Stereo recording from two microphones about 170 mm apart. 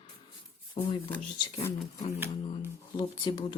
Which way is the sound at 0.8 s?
45° left (ahead or behind).